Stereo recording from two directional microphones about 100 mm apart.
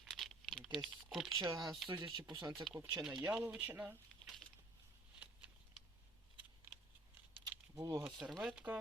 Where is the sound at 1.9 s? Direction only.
50° right (ahead or behind).